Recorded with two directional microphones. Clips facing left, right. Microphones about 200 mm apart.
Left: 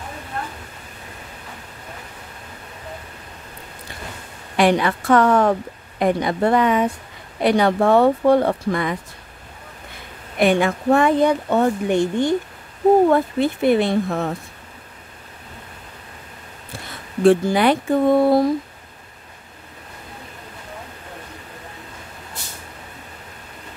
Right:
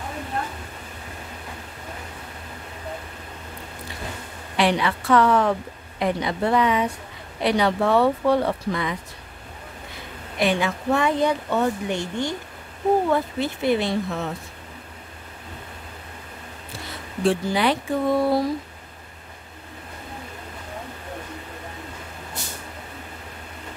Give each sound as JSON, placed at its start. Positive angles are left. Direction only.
{"t": 4.6, "sound": "a woman's voice", "side_deg": 50}
{"t": 10.4, "sound": "a woman's voice", "side_deg": 55}
{"t": 17.2, "sound": "a woman's voice", "side_deg": 55}